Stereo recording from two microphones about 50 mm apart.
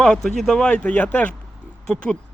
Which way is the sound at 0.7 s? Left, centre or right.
Left.